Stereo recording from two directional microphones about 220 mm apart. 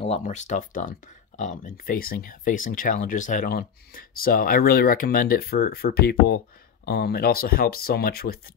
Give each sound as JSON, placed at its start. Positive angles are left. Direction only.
{"t": 0.0, "sound": "speech", "side_deg": 30}